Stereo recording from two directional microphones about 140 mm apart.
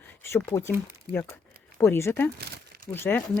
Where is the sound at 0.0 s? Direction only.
15° left (ahead or behind).